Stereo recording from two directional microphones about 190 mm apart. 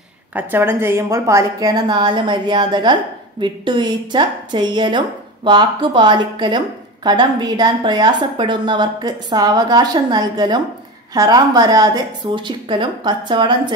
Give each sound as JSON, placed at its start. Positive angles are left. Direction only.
{"t": 0.3, "sound": "a woman's voice", "side_deg": -10}